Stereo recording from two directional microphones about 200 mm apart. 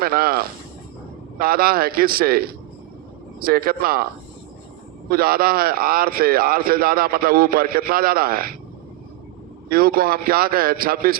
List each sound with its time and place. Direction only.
0.0 s a man's voice: 50° right (ahead or behind)
9.6 s a man's voice: 50° right (ahead or behind)